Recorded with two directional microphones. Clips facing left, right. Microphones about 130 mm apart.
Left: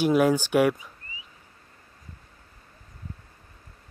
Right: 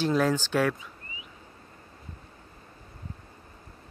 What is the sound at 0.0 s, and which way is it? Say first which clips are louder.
Speech: left 4 dB; 10° left (ahead or behind).